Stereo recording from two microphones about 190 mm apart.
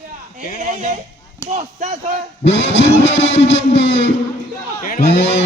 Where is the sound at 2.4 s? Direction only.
70° left (ahead or behind).